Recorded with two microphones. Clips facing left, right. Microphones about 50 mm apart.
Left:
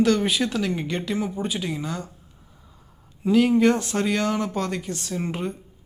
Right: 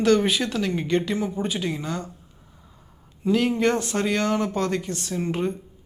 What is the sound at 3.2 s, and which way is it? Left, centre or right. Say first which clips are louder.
Speech: left 3 dB; centre.